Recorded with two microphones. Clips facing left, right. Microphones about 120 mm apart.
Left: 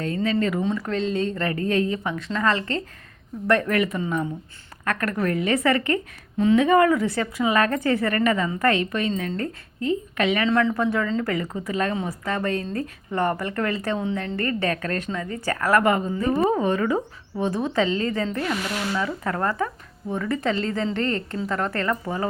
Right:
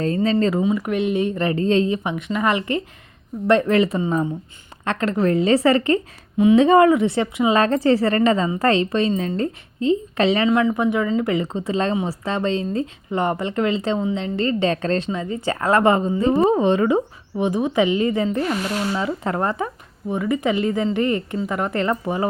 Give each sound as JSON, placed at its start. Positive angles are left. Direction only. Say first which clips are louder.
{"t": 0.0, "sound": "speech", "louder": "right 4 dB", "side_deg": -35}
{"t": 0.6, "sound": "a woman's voice", "louder": "right 4 dB", "side_deg": -10}
{"t": 6.6, "sound": "a woman's voice", "louder": "right 4 dB", "side_deg": -30}
{"t": 10.5, "sound": "a woman's voice", "louder": "right 3 dB", "side_deg": -15}